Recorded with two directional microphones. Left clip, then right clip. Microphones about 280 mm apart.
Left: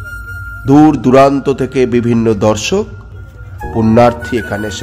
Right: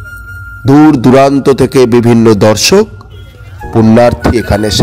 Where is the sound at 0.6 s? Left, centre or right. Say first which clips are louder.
Right 3 dB; centre.